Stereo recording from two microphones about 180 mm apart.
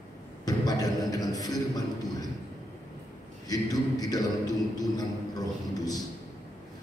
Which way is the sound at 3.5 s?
20° left (ahead or behind).